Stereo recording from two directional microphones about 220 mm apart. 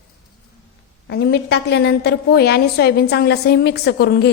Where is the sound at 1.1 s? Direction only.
50° left (ahead or behind).